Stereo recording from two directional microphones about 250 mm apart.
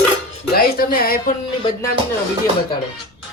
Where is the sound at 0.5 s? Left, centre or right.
Left.